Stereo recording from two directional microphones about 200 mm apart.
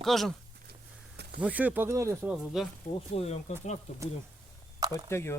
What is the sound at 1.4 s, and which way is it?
Speech, 5° right (ahead or behind).